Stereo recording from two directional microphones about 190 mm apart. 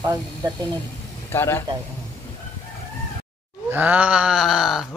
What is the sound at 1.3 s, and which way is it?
Speech, 15° left (ahead or behind).